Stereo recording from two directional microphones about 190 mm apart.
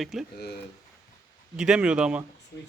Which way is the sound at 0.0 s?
Centre (ahead or behind).